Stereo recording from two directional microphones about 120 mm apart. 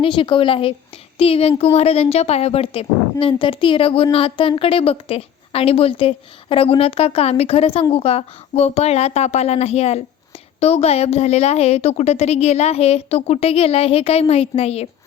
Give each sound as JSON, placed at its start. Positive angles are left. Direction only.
{"t": 0.0, "sound": "a woman's voice", "side_deg": 45}